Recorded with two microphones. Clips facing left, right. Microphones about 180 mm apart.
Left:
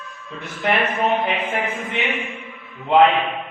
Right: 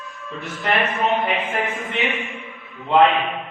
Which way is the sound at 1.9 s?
Centre (ahead or behind).